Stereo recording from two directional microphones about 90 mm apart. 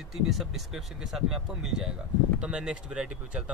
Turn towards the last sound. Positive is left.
turn(degrees=-10)  # may be behind; listen again after turning